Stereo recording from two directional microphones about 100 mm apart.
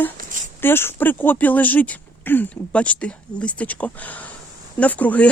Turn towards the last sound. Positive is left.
turn(degrees=15)  # may be behind; listen again after turning